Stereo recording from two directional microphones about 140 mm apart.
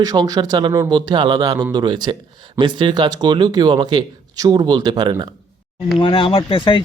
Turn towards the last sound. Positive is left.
turn(degrees=35)  # may be behind; listen again after turning